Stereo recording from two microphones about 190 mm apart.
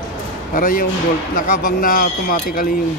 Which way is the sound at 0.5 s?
50° left (ahead or behind).